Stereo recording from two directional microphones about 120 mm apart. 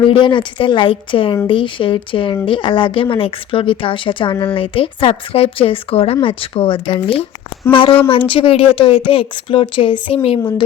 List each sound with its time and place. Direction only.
0.0 s speech: 45° left (ahead or behind)